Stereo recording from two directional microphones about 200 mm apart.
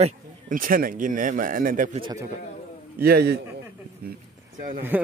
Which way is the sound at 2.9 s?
50° right (ahead or behind).